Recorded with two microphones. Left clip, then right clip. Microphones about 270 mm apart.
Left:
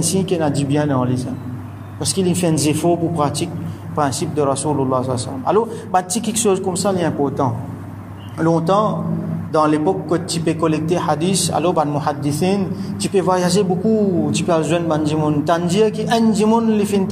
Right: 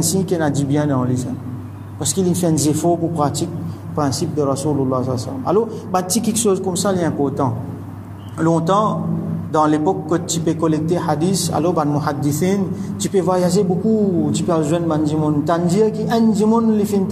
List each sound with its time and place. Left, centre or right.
0.0 s a woman's voice: centre
2.1 s a man's voice: centre
4.4 s speech: left
5.0 s a man's voice: centre